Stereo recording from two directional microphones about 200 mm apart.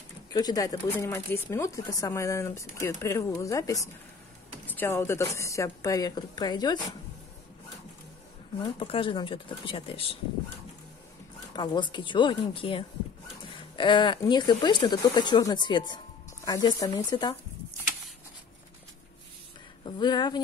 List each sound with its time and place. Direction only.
0.3 s speech: 20° left (ahead or behind)
8.6 s speech: 25° left (ahead or behind)
11.5 s speech: 20° left (ahead or behind)
19.8 s speech: 20° left (ahead or behind)